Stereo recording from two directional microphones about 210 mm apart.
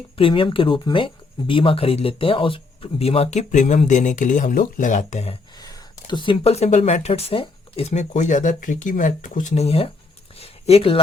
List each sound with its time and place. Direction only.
0.2 s speech: 25° left (ahead or behind)
5.5 s speech: 20° left (ahead or behind)
10.3 s a sound: 30° left (ahead or behind)